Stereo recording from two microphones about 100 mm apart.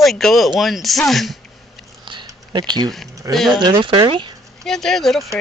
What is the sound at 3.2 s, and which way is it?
Speech, 30° right (ahead or behind).